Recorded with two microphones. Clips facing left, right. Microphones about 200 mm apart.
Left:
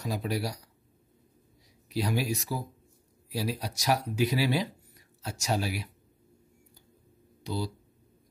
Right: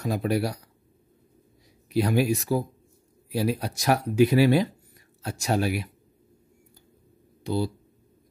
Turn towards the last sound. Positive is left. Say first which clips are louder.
# right 7 dB
turn(degrees=-55)  # may be behind; listen again after turning